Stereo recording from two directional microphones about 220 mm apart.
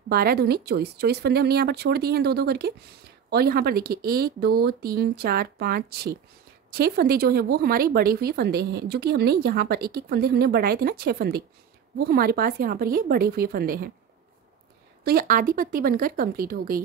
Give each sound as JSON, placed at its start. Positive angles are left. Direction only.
{"t": 0.1, "sound": "speech", "side_deg": -45}
{"t": 15.0, "sound": "speech", "side_deg": -40}